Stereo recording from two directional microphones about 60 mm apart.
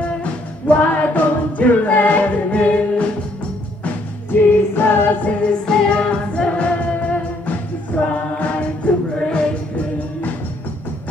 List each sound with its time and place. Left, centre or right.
0.2 s music: left
3.8 s music: left
5.5 s music: centre